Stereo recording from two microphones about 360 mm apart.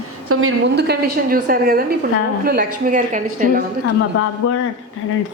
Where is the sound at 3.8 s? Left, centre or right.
Left.